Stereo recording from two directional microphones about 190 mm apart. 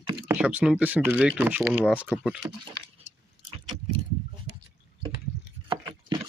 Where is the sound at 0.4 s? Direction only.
5° right (ahead or behind).